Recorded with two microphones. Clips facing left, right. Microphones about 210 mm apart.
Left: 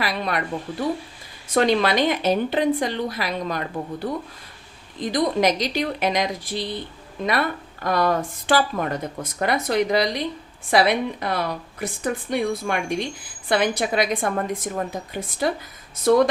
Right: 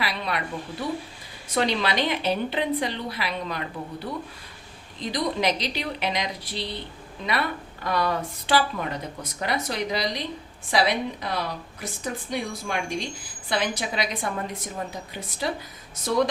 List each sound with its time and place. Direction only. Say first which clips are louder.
0.0 s speech: left 4 dB; 45° left (ahead or behind)
1.5 s a woman's voice: left 6 dB; 50° left (ahead or behind)